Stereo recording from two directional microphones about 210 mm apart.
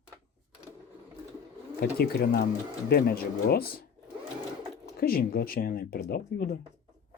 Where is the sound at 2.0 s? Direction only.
50° left (ahead or behind).